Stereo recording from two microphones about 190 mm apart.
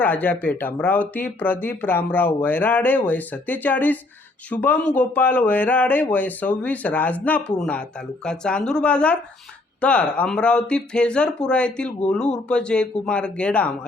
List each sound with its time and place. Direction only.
0.0 s speech: 10° left (ahead or behind)